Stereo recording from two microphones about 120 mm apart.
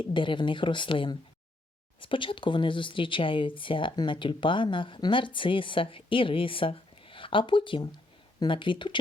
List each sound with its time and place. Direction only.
0.0 s speech: 45° left (ahead or behind)